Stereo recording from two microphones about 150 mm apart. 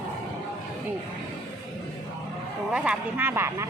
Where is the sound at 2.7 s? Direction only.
10° right (ahead or behind).